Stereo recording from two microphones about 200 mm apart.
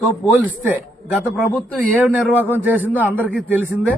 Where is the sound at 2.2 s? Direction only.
10° left (ahead or behind).